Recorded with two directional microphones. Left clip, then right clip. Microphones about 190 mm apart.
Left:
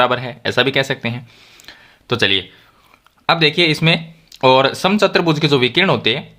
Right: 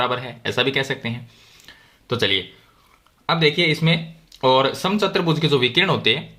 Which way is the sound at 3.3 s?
35° left (ahead or behind).